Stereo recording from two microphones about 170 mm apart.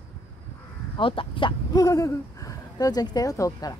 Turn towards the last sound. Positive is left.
turn(degrees=20)  # may be behind; listen again after turning